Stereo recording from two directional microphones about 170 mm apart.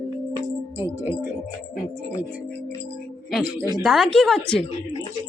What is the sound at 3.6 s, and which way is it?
Speech, 20° right (ahead or behind).